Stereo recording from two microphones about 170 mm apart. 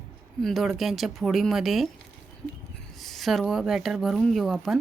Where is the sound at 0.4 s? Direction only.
Centre (ahead or behind).